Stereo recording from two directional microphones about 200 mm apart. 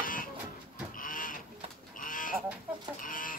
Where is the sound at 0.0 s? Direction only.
45° left (ahead or behind).